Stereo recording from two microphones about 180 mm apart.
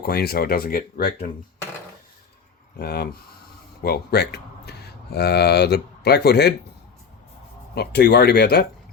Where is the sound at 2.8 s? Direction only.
60° left (ahead or behind).